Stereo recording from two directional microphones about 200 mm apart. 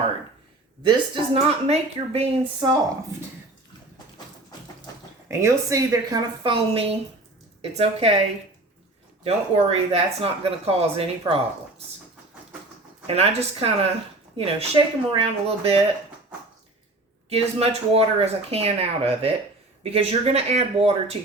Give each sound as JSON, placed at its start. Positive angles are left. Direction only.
{"t": 0.8, "sound": "speech", "side_deg": -25}
{"t": 5.3, "sound": "a woman's voice", "side_deg": -15}
{"t": 9.2, "sound": "speech", "side_deg": -30}
{"t": 13.1, "sound": "speech", "side_deg": -30}
{"t": 17.2, "sound": "speech", "side_deg": -30}